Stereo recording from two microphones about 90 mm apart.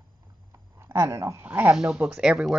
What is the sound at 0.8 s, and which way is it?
Speech, 30° right (ahead or behind).